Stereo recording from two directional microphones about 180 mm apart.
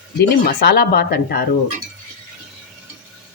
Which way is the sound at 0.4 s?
60° left (ahead or behind).